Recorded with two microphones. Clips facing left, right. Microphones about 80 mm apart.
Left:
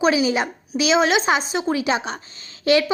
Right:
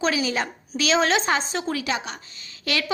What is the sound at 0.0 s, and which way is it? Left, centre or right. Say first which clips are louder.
A woman's voice: left 5 dB; centre.